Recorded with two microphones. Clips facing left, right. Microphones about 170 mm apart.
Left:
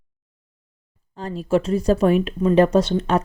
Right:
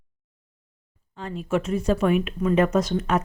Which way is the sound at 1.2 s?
35° left (ahead or behind).